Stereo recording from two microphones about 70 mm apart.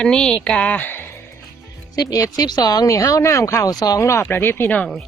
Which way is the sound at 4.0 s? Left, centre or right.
Left.